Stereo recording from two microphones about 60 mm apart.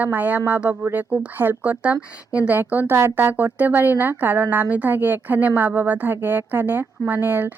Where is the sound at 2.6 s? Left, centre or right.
Right.